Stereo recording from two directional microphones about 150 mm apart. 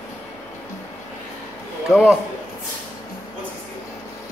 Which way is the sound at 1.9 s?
5° right (ahead or behind).